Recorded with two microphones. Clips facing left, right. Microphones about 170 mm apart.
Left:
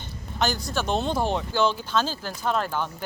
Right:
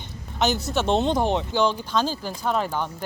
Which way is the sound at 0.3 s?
20° right (ahead or behind).